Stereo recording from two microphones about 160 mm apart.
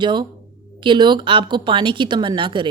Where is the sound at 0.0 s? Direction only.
30° right (ahead or behind).